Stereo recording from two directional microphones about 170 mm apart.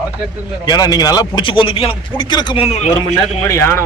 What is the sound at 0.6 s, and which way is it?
A man's voice, 25° left (ahead or behind).